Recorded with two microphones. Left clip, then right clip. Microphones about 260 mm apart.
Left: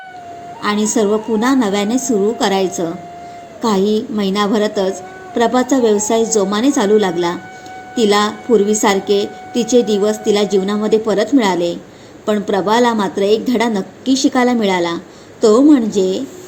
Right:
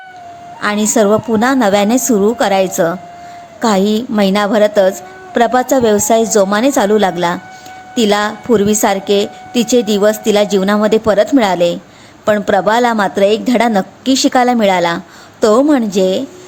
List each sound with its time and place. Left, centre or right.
0.6 s a woman's voice: right